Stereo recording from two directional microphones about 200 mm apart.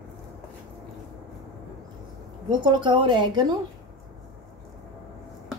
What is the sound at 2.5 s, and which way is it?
A woman's voice, 20° right (ahead or behind).